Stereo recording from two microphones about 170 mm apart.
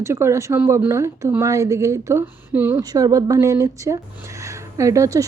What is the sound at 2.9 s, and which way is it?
Speech, 20° right (ahead or behind).